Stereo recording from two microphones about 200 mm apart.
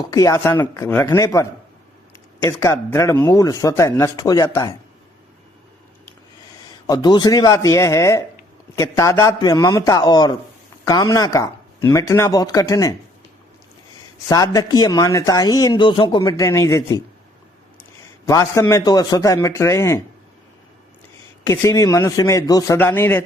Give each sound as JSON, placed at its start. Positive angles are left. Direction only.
{"t": 0.1, "sound": "speech", "side_deg": 15}
{"t": 6.8, "sound": "speech", "side_deg": 20}
{"t": 14.3, "sound": "speech", "side_deg": 20}
{"t": 18.3, "sound": "speech", "side_deg": 15}
{"t": 21.4, "sound": "speech", "side_deg": 15}